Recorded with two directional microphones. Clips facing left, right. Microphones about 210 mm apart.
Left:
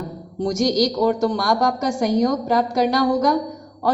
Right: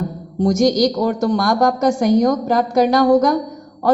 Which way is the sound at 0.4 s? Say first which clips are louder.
Right 4 dB; 50° right (ahead or behind).